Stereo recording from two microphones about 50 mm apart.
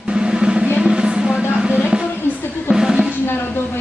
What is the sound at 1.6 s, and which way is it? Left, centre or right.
Music, centre.